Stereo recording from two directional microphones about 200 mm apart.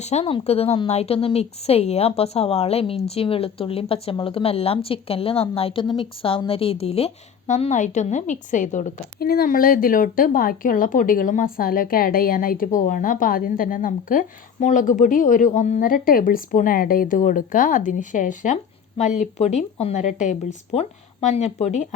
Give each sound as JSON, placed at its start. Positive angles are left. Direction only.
{"t": 0.0, "sound": "speech", "side_deg": 35}